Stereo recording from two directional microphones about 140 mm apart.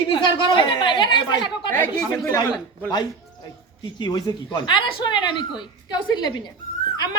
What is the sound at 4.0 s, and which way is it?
Speech, 30° left (ahead or behind).